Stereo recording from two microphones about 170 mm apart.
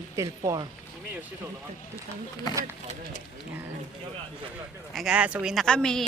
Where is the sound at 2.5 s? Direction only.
20° right (ahead or behind).